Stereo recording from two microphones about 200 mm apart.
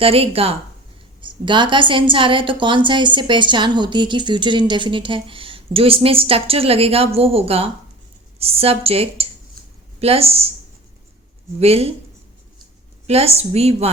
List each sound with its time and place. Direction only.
0.0 s a woman's voice: 30° right (ahead or behind)
11.6 s a woman's voice: 30° right (ahead or behind)
13.1 s a woman's voice: 30° right (ahead or behind)